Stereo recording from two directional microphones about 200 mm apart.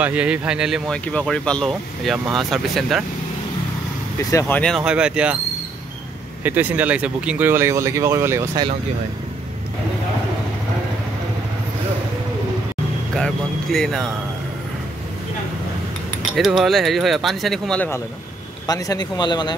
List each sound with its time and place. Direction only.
0.0 s speech: 5° right (ahead or behind)
4.3 s speech: 10° left (ahead or behind); by 5.4 s 5° right (ahead or behind)
6.4 s speech: 10° right (ahead or behind)
13.1 s speech: centre (ahead or behind)
16.3 s speech: centre (ahead or behind); by 19.5 s 20° left (ahead or behind)